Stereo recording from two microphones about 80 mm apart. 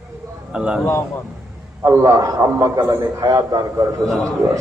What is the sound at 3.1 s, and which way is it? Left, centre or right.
Speech, right.